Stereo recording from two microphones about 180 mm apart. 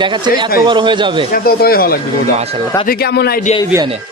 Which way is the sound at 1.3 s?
55° left (ahead or behind).